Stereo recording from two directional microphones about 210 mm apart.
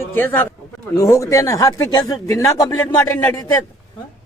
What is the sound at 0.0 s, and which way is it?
A man's voice, 10° left (ahead or behind).